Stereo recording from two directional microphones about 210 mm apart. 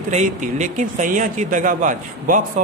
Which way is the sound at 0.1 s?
35° right (ahead or behind).